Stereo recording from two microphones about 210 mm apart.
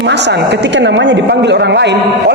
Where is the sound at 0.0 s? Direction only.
55° right (ahead or behind).